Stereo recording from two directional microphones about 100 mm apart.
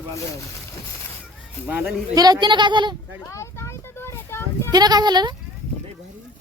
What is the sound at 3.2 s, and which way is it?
Vehicle, 30° left (ahead or behind).